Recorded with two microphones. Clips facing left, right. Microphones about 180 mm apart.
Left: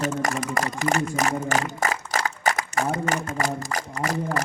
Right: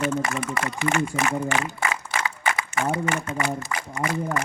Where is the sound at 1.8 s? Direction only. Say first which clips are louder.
Left 2 dB; 40° left (ahead or behind).